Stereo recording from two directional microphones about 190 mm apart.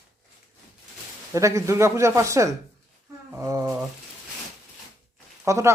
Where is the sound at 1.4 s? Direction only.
15° right (ahead or behind).